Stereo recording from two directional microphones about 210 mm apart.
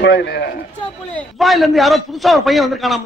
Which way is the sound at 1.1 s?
Centre (ahead or behind).